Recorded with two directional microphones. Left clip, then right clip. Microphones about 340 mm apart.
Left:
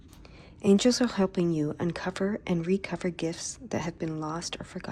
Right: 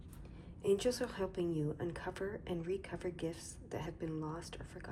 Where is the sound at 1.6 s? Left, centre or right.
Left.